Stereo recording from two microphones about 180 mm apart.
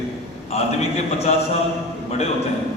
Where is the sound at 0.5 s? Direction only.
35° left (ahead or behind).